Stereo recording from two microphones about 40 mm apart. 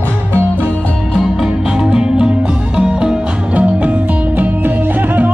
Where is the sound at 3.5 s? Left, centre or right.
Right.